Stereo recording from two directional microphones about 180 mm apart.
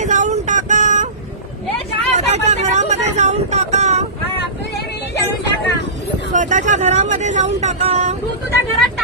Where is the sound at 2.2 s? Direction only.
40° right (ahead or behind).